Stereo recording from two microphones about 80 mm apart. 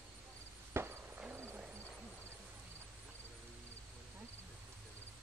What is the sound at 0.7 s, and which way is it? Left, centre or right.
Chop, right.